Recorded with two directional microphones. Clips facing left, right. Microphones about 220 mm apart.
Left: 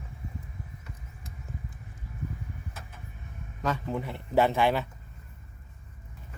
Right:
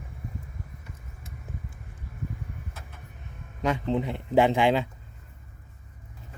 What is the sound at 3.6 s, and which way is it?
Speech, 15° right (ahead or behind).